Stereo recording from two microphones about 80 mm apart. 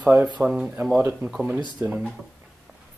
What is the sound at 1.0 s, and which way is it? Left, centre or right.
Speech, right.